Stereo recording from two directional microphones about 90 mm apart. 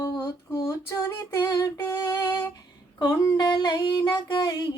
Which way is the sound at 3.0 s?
40° left (ahead or behind).